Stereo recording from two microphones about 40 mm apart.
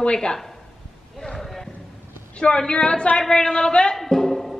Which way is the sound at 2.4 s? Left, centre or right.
Centre.